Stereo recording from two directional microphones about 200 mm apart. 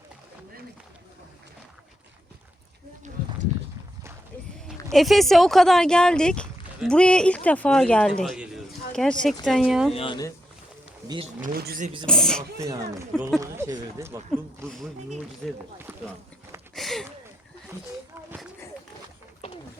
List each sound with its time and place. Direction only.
4.9 s speech: centre (ahead or behind)
9.9 s speech: 25° left (ahead or behind)
11.3 s speech: 45° right (ahead or behind)
12.0 s speech: 5° left (ahead or behind)
12.5 s speech: 15° right (ahead or behind)
15.4 s speech: centre (ahead or behind)
15.9 s a sound: 10° right (ahead or behind)
16.7 s a sound: centre (ahead or behind)